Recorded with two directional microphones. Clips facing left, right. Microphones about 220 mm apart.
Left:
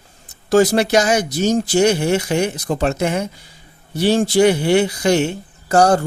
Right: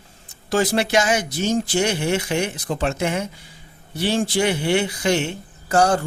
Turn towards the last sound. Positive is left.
turn(degrees=40)  # may be behind; listen again after turning